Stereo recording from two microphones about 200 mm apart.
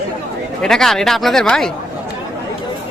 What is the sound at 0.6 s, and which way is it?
Speech, centre (ahead or behind).